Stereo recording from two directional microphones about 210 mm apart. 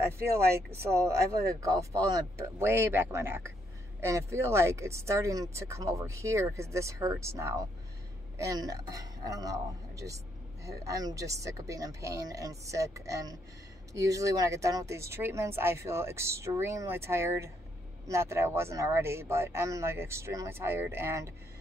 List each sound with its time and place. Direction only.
0.7 s a man's voice: 15° right (ahead or behind)